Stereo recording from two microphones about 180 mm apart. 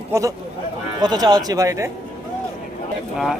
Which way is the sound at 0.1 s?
20° right (ahead or behind).